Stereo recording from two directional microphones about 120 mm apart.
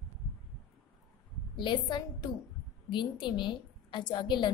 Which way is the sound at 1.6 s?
40° left (ahead or behind).